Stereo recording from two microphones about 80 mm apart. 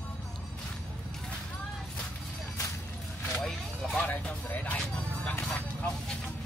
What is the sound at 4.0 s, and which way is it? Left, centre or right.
Music, centre.